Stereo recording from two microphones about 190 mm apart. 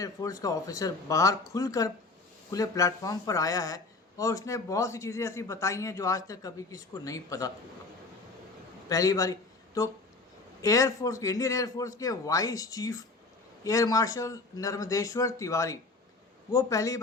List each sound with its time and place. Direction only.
0.0 s speech: 20° left (ahead or behind)
8.9 s speech: 15° left (ahead or behind)